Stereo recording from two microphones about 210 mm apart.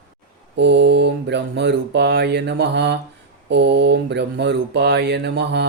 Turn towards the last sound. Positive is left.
turn(degrees=-55)  # may be behind; listen again after turning